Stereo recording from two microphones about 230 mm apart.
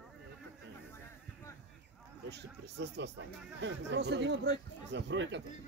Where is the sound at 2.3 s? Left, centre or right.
Right.